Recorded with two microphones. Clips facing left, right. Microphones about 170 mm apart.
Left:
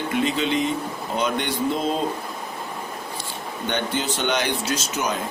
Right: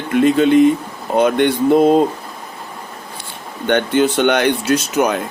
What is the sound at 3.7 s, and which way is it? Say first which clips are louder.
Speech: right 11 dB; 60° right (ahead or behind).